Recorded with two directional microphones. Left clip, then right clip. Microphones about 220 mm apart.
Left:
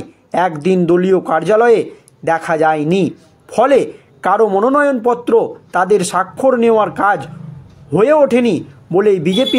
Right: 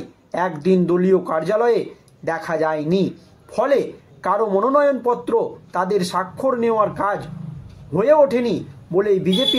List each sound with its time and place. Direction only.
0.3 s speech: 40° left (ahead or behind)